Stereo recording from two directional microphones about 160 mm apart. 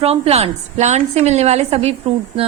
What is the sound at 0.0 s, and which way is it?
A woman's voice, 40° right (ahead or behind).